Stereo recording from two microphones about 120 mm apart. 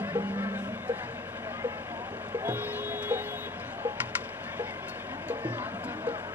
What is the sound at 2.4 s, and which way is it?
Music, 15° right (ahead or behind).